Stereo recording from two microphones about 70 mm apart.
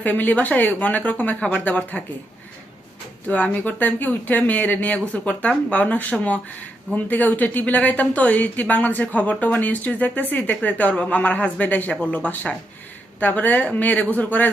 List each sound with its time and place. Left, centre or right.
0.0 s speech: left
3.2 s speech: left